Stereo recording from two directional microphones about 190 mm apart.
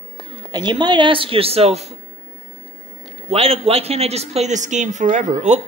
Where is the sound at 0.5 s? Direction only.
20° right (ahead or behind).